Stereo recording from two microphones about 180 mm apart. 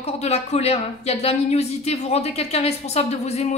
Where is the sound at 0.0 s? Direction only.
35° left (ahead or behind).